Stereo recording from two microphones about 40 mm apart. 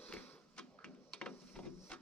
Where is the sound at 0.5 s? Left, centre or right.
Left.